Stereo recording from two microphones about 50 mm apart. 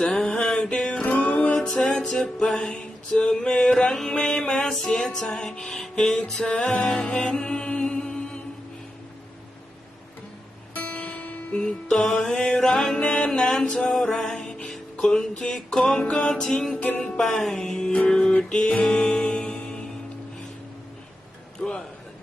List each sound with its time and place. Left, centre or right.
0.0 s music: centre
1.0 s music: left
1.5 s music: centre
10.8 s music: left; by 15.1 s centre
15.1 s music: centre
16.7 s music: left
17.2 s music: centre
21.6 s a man's voice: centre